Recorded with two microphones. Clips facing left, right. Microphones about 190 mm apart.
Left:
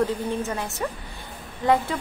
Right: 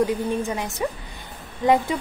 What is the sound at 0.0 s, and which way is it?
Speech, 15° right (ahead or behind).